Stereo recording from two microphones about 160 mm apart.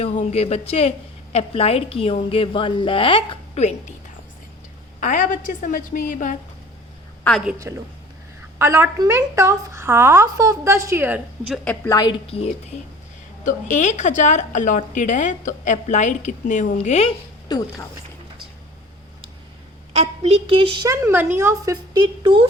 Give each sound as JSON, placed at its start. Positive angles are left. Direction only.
{"t": 0.0, "sound": "a woman's voice", "side_deg": 45}
{"t": 4.9, "sound": "a woman's voice", "side_deg": 55}
{"t": 7.3, "sound": "a woman's voice", "side_deg": 5}
{"t": 8.5, "sound": "a woman's voice", "side_deg": -15}
{"t": 11.9, "sound": "a woman's voice", "side_deg": 25}
{"t": 12.3, "sound": "a woman's voice", "side_deg": 35}
{"t": 13.4, "sound": "a woman's voice", "side_deg": 50}
{"t": 19.9, "sound": "a woman's voice", "side_deg": -40}
{"t": 20.8, "sound": "a woman's voice", "side_deg": -15}